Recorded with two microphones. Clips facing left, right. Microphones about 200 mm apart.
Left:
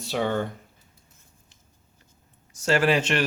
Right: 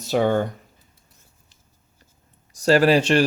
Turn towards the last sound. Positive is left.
turn(degrees=-35)  # may be behind; listen again after turning